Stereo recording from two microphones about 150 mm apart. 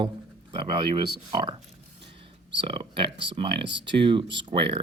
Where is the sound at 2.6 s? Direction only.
35° right (ahead or behind).